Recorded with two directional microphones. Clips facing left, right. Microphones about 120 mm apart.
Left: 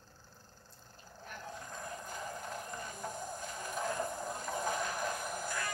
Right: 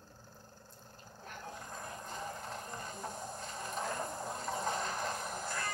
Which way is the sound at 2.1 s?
30° right (ahead or behind).